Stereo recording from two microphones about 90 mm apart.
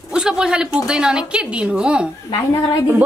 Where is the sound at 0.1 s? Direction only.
5° right (ahead or behind).